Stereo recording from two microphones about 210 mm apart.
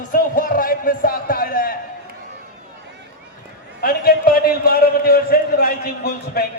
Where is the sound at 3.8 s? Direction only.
45° left (ahead or behind).